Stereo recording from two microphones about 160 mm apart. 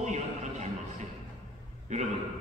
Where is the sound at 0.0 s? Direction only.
45° right (ahead or behind).